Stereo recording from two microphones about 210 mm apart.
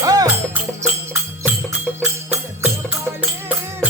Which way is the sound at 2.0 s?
10° right (ahead or behind).